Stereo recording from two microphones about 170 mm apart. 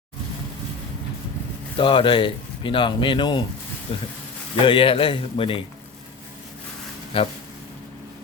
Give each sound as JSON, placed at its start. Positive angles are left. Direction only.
{"t": 1.8, "sound": "speech", "side_deg": 30}
{"t": 7.1, "sound": "speech", "side_deg": 35}